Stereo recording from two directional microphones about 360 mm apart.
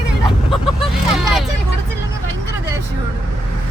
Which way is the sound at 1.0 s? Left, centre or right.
Centre.